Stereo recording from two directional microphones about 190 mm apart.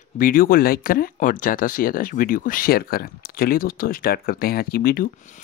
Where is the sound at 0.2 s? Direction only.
50° left (ahead or behind).